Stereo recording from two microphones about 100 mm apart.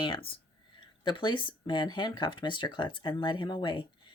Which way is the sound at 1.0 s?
50° left (ahead or behind).